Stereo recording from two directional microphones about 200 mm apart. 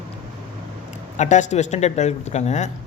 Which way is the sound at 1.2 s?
35° left (ahead or behind).